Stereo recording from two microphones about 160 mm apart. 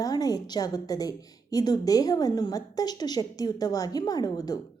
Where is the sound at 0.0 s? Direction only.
25° left (ahead or behind).